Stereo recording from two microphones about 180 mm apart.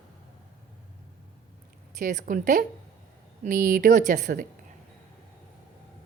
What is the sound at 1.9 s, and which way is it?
A woman's voice, 45° right (ahead or behind).